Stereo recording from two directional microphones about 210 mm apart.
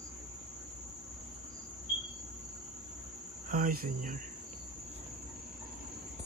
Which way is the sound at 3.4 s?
40° right (ahead or behind).